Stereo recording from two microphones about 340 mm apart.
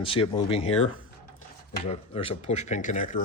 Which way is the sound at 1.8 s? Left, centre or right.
Centre.